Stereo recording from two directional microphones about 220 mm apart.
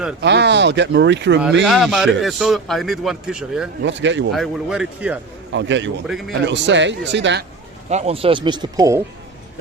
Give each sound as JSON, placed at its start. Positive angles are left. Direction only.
{"t": 0.2, "sound": "speech", "side_deg": -50}
{"t": 1.6, "sound": "speech", "side_deg": 0}
{"t": 3.8, "sound": "speech", "side_deg": -55}
{"t": 4.3, "sound": "speech", "side_deg": 0}
{"t": 5.5, "sound": "speech", "side_deg": -55}
{"t": 7.9, "sound": "speech", "side_deg": -30}